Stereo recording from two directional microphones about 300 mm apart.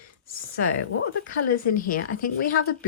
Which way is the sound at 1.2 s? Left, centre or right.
Left.